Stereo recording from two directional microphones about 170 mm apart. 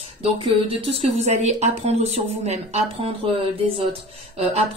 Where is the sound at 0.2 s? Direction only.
35° right (ahead or behind).